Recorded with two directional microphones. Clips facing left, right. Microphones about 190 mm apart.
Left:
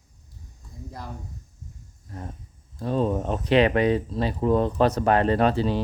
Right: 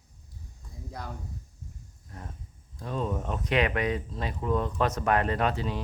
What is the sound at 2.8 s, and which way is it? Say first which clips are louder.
Speech: left 7 dB; 35° left (ahead or behind).